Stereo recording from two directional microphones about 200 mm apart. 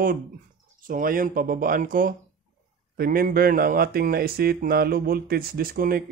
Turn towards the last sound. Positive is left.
turn(degrees=-50)  # may be behind; listen again after turning